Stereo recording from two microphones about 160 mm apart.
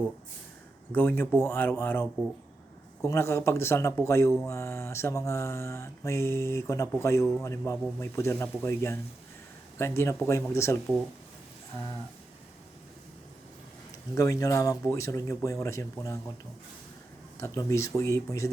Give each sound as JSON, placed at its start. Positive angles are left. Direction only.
{"t": 0.9, "sound": "mantra", "side_deg": 15}
{"t": 14.2, "sound": "speech", "side_deg": 20}
{"t": 17.3, "sound": "speech", "side_deg": 20}